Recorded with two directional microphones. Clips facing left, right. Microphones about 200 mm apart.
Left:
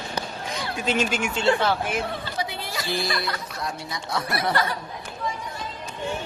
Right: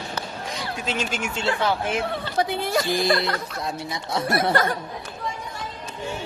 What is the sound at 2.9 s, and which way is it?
Speech, 25° right (ahead or behind).